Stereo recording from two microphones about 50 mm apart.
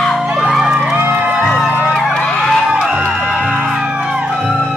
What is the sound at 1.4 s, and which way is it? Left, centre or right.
Music, centre.